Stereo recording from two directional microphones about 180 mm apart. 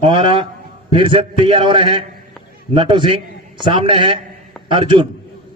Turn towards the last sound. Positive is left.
turn(degrees=-30)  # may be behind; listen again after turning